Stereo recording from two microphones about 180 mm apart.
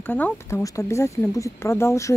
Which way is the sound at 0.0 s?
10° left (ahead or behind).